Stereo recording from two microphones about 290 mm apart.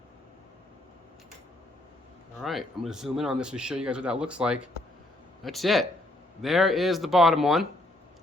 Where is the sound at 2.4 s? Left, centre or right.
Centre.